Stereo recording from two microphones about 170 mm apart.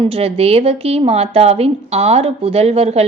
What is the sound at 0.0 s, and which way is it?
A woman's voice, 35° right (ahead or behind).